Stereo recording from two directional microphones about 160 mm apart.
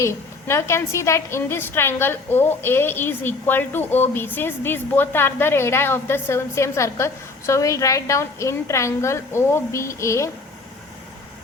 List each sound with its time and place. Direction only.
0.0 s a woman's voice: 15° left (ahead or behind)